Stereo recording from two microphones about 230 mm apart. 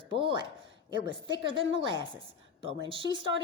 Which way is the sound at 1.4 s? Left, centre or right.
Right.